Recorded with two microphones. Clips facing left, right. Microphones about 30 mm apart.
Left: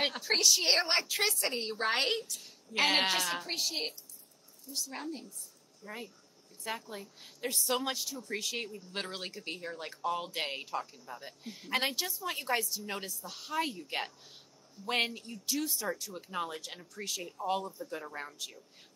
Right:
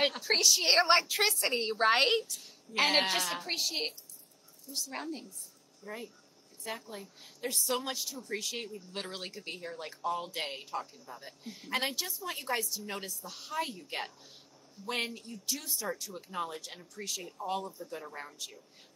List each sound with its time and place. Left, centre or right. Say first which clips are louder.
0.0 s a woman's voice: right 1 dB; centre
2.7 s speech: even; centre
5.8 s speech: right 2 dB; left
6.6 s speech: left 1 dB; centre